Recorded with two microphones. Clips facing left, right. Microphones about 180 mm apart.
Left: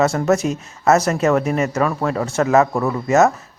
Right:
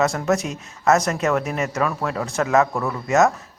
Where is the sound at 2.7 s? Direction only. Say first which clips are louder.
Left 5 dB; 15° left (ahead or behind).